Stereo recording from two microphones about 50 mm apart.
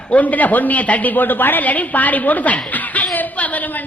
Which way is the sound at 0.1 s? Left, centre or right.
Left.